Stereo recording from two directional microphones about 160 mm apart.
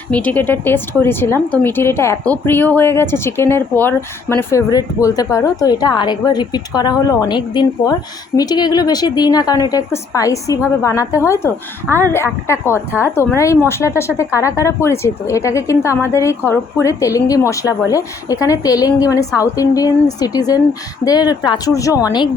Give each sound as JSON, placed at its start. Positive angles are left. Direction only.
{"t": 0.1, "sound": "speech", "side_deg": 10}